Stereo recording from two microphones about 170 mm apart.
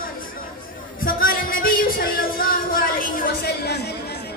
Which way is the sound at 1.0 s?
55° left (ahead or behind).